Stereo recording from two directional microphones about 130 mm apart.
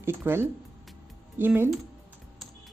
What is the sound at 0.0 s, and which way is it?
A woman's voice, 15° right (ahead or behind).